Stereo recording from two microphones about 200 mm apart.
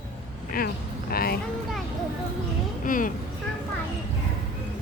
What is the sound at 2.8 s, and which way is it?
Speech, 40° left (ahead or behind).